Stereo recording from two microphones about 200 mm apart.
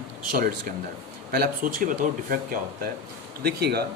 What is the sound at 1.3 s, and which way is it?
Speech, 45° right (ahead or behind).